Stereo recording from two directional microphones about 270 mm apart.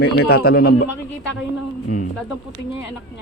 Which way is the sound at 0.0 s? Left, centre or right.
Left.